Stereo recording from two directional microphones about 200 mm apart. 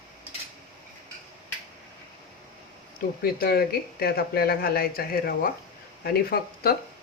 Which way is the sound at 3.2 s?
50° left (ahead or behind).